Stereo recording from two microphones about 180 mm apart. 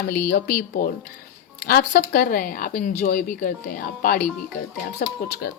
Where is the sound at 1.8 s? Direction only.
50° left (ahead or behind).